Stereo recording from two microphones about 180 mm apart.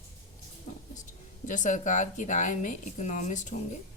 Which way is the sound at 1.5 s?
45° left (ahead or behind).